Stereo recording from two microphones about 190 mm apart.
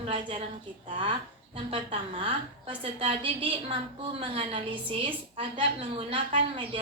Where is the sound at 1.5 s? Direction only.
30° right (ahead or behind).